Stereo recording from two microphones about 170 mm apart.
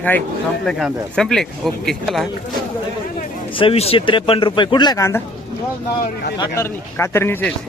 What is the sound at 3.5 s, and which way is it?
Speech, 35° left (ahead or behind).